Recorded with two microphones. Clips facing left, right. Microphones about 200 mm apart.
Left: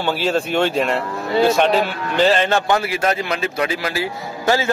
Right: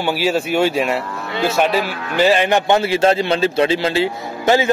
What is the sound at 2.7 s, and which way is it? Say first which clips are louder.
A man's voice: right 4 dB; 25° right (ahead or behind).